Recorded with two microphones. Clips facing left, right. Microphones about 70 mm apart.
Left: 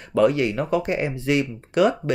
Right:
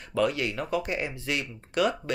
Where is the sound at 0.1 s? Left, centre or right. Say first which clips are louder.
Left 8 dB; left.